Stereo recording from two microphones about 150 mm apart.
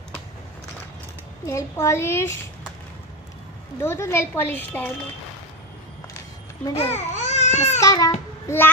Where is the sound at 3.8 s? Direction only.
20° left (ahead or behind).